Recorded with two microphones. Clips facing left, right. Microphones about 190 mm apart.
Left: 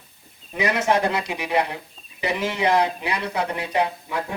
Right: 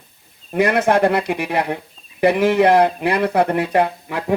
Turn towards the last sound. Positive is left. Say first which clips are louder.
# right 5 dB
turn(degrees=-55)  # may be behind; listen again after turning